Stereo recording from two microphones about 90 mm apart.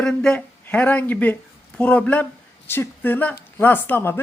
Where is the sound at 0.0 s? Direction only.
5° left (ahead or behind).